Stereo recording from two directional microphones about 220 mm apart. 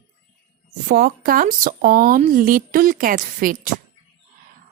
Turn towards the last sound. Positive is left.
turn(degrees=-40)  # may be behind; listen again after turning